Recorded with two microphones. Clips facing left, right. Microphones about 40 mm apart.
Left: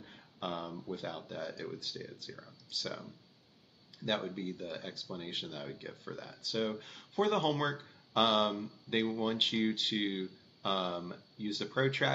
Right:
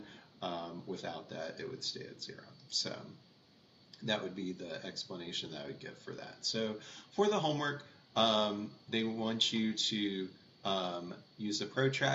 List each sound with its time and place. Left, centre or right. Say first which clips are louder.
0.4 s speech: left 1 dB; centre